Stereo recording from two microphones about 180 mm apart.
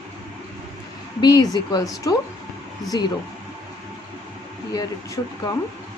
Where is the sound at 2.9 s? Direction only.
25° left (ahead or behind).